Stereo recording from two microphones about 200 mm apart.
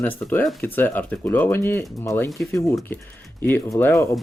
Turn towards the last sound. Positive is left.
turn(degrees=10)  # may be behind; listen again after turning